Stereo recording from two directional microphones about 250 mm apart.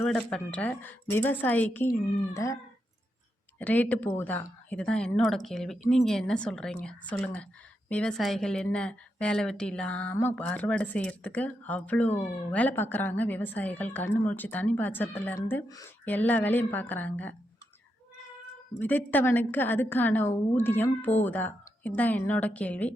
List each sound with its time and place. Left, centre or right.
0.0 s a woman's voice: centre
3.6 s a woman's voice: centre
18.8 s a woman's voice: centre